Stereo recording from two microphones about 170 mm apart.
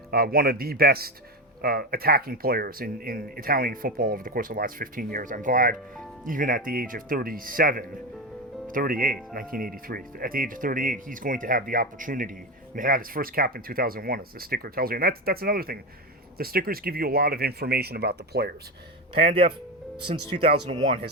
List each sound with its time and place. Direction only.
0.1 s speech: 65° right (ahead or behind)
19.2 s speech: 35° right (ahead or behind)